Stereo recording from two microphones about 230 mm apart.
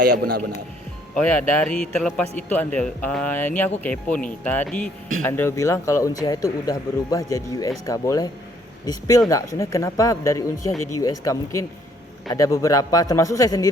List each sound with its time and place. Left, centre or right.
0.2 s a man's voice: right
1.1 s speech: centre